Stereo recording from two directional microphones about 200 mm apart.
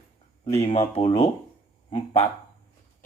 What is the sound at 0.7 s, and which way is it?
Speech, 30° left (ahead or behind).